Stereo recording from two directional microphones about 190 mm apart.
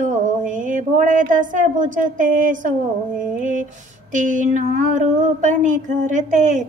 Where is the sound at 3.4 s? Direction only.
40° right (ahead or behind).